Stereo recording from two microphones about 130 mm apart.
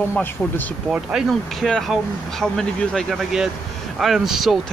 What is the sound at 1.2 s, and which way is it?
Speech, 5° right (ahead or behind).